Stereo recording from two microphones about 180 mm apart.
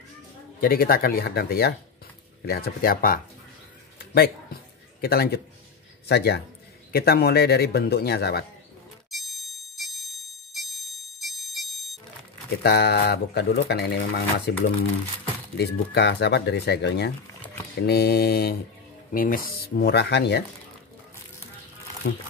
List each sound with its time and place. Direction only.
0.6 s speech: 55° left (ahead or behind)
4.0 s a sound: 60° left (ahead or behind)
5.0 s speech: 60° left (ahead or behind)
9.8 s alarm: centre (ahead or behind)
12.6 s speech: 65° left (ahead or behind)
15.5 s speech: 65° left (ahead or behind)
22.0 s speech: 65° left (ahead or behind)